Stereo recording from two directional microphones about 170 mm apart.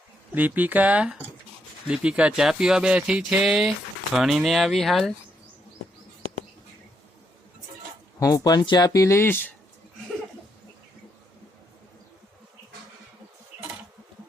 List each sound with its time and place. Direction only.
0.3 s speech: 10° right (ahead or behind)
8.2 s speech: 20° left (ahead or behind)